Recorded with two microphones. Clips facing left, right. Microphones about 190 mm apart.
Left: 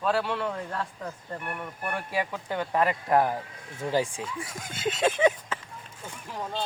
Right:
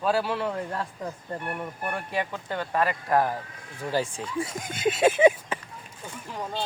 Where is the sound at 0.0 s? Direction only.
5° right (ahead or behind).